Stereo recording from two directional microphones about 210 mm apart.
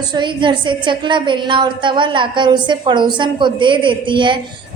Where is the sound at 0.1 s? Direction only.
20° right (ahead or behind).